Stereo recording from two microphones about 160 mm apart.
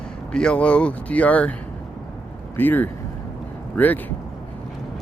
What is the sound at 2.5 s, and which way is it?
Speech, 10° left (ahead or behind).